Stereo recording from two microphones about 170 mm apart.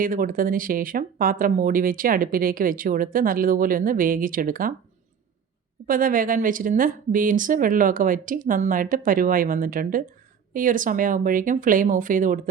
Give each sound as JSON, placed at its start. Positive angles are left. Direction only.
{"t": 0.0, "sound": "speech", "side_deg": -55}
{"t": 5.9, "sound": "speech", "side_deg": -55}